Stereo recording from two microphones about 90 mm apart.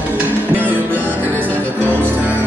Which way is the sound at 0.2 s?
20° right (ahead or behind).